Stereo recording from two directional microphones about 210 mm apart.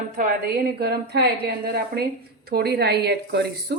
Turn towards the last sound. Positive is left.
turn(degrees=-55)  # may be behind; listen again after turning